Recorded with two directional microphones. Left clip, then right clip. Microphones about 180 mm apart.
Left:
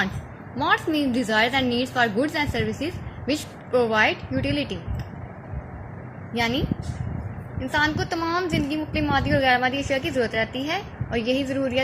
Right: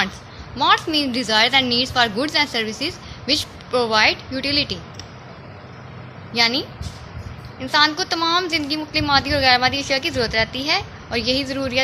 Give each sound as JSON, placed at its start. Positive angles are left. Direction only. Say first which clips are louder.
{"t": 0.6, "sound": "a woman's voice", "louder": "right 5 dB", "side_deg": -10}
{"t": 6.3, "sound": "a woman's voice", "louder": "right 6 dB", "side_deg": -15}
{"t": 7.7, "sound": "a woman's voice", "louder": "right 6 dB", "side_deg": -15}